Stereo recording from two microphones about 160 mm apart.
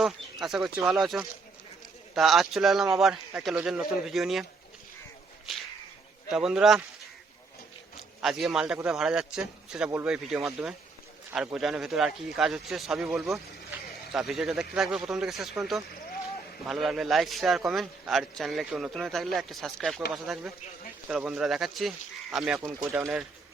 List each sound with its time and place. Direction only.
0.0 s speech: centre (ahead or behind)
6.3 s speech: 5° right (ahead or behind)
8.2 s speech: centre (ahead or behind)
22.9 s speech: 15° right (ahead or behind)